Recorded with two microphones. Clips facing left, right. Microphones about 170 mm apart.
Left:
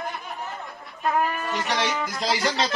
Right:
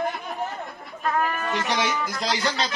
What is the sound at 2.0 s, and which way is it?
Speech, centre (ahead or behind).